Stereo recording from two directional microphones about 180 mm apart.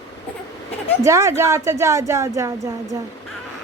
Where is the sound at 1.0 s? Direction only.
15° right (ahead or behind).